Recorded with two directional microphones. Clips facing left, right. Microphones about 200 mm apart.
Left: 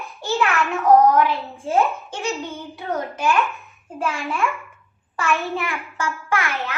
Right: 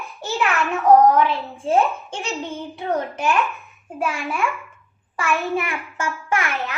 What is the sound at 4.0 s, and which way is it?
Speech, 15° right (ahead or behind).